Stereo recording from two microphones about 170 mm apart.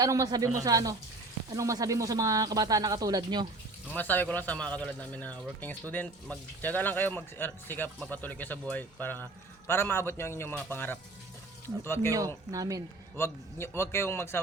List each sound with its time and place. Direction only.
0.0 s speech: 20° right (ahead or behind)
3.9 s speech: 10° left (ahead or behind)
12.5 s speech: 20° right (ahead or behind)
13.1 s speech: 15° left (ahead or behind)